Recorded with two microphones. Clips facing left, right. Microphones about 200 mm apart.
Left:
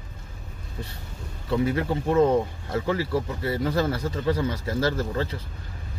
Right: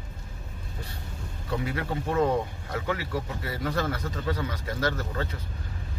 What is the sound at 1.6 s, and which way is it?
Speech, 25° left (ahead or behind).